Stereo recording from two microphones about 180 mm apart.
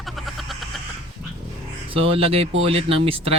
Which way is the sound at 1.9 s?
30° right (ahead or behind).